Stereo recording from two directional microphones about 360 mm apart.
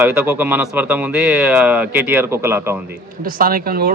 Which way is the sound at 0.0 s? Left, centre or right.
Centre.